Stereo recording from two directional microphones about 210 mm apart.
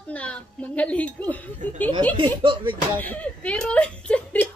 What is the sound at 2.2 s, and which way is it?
Speech, 25° right (ahead or behind).